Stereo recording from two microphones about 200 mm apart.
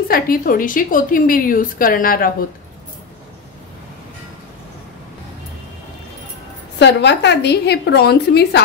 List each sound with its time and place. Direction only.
0.1 s a woman's voice: 45° left (ahead or behind)
6.8 s a woman's voice: 60° left (ahead or behind)